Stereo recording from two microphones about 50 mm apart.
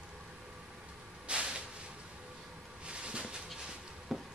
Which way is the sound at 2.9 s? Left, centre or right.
Right.